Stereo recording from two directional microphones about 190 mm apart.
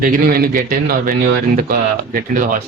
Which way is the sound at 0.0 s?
50° right (ahead or behind).